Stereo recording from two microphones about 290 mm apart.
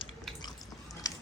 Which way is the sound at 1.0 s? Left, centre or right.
Centre.